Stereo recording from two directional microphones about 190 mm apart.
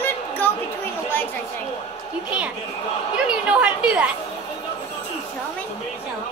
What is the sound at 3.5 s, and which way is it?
Speech, 5° right (ahead or behind).